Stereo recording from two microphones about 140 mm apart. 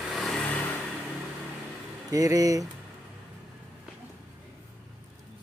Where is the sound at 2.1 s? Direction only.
25° right (ahead or behind).